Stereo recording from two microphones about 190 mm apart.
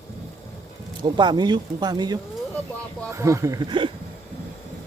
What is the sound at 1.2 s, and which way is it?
Speech, 25° right (ahead or behind).